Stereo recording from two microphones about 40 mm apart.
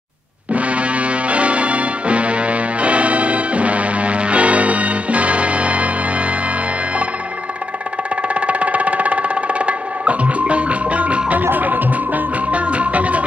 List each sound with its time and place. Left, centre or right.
0.5 s music: right
8.4 s music: right
11.5 s music: right